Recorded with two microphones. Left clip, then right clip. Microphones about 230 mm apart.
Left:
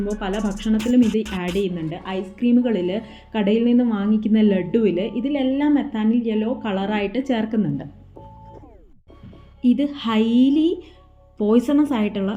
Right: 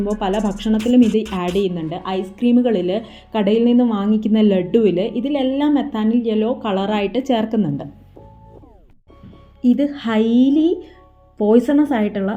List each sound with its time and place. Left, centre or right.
0.0 s a woman's voice: centre
1.0 s speech: centre
1.5 s a woman's voice: centre
9.6 s speech: centre